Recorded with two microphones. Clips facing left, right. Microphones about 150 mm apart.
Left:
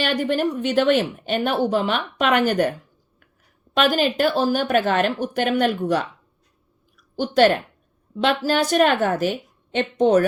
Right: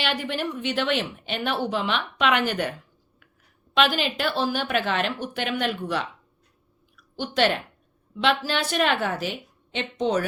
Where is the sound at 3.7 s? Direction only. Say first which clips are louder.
Left 4 dB; 45° left (ahead or behind).